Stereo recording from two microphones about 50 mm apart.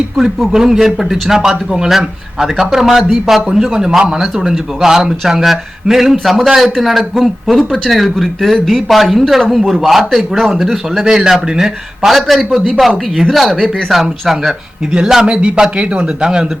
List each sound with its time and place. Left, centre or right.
0.2 s speech: centre
0.5 s speech: centre